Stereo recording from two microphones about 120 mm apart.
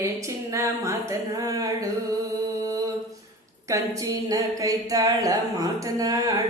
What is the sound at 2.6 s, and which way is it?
Mantra, 30° right (ahead or behind).